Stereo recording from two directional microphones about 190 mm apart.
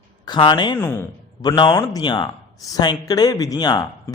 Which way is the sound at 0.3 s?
20° left (ahead or behind).